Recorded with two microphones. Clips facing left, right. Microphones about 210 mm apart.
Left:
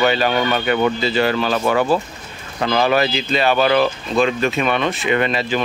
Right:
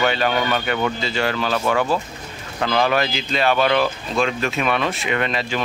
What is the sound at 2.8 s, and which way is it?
Speech, centre (ahead or behind).